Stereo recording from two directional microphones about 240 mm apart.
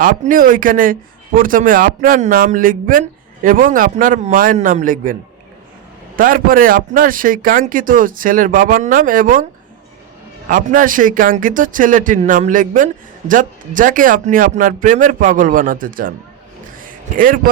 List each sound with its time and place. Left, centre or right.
0.0 s speech: right
6.1 s speech: right
10.5 s speech: right
16.8 s a sound: right